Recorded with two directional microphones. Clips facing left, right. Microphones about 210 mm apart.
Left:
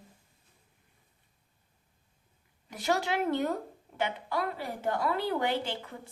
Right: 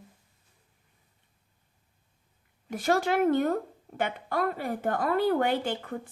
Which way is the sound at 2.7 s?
50° right (ahead or behind).